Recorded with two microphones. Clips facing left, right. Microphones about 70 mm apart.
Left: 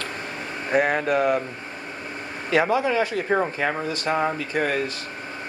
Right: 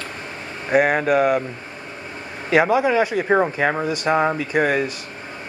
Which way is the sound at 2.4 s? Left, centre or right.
Centre.